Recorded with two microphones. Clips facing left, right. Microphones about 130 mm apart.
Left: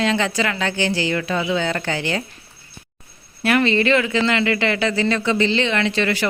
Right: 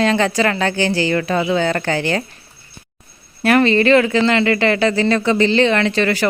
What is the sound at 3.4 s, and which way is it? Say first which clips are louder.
Speech: right 4 dB; 45° right (ahead or behind).